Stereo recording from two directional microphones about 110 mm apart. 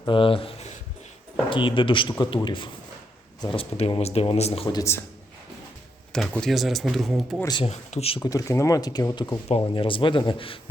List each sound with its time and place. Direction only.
0.1 s speech: 50° left (ahead or behind)
3.5 s speech: 55° left (ahead or behind)
4.7 s speech: 30° left (ahead or behind)
6.1 s speech: 5° left (ahead or behind)
7.6 s speech: 85° left
8.2 s speech: 30° left (ahead or behind)
9.7 s speech: 50° left (ahead or behind)